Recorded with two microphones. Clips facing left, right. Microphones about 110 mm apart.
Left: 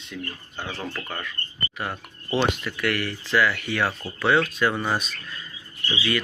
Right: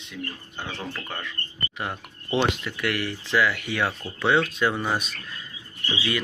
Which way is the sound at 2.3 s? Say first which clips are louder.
Even; 15° right (ahead or behind).